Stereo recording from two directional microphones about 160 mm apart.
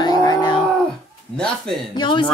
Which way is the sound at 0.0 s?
25° left (ahead or behind).